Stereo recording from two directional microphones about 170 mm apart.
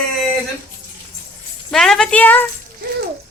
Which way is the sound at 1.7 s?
5° left (ahead or behind).